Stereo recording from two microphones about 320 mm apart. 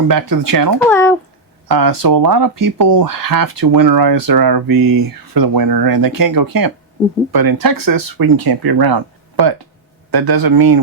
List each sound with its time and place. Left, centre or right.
0.1 s speech: right
0.9 s speech: centre
1.6 s speech: right
10.1 s speech: right